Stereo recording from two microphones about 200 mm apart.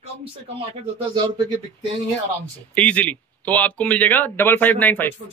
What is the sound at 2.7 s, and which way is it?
A man's voice, 5° left (ahead or behind).